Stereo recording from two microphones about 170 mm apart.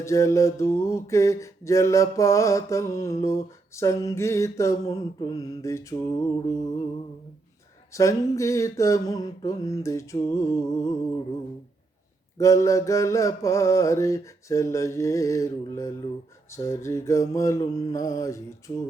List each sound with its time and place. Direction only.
0.0 s mantra: 15° left (ahead or behind)
7.9 s mantra: 20° left (ahead or behind)
12.4 s mantra: 20° left (ahead or behind)